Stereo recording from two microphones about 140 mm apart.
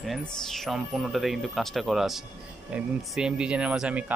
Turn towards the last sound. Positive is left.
turn(degrees=-10)  # may be behind; listen again after turning